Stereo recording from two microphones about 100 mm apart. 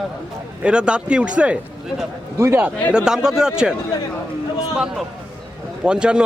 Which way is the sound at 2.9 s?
5° right (ahead or behind).